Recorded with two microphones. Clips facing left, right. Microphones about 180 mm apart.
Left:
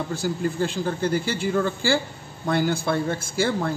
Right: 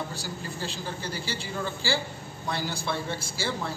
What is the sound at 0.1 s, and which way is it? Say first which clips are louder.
Speech: left 11 dB; 50° left (ahead or behind).